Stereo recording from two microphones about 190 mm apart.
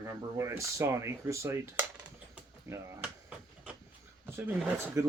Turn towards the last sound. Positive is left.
turn(degrees=-10)  # may be behind; listen again after turning